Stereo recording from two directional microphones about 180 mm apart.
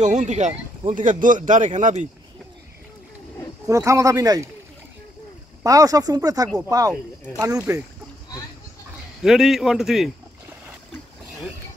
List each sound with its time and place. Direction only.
0.0 s a man's voice: 40° right (ahead or behind)
3.6 s speech: 15° right (ahead or behind)
5.6 s speech: 20° right (ahead or behind)
9.2 s a man's voice: 5° right (ahead or behind)